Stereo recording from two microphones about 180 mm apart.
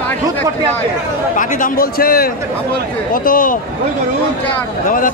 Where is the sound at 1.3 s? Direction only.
45° left (ahead or behind).